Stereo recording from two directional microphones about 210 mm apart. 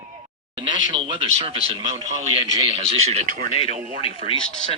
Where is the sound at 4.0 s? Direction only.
25° left (ahead or behind).